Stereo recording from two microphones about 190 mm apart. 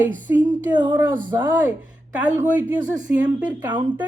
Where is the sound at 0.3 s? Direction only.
15° right (ahead or behind).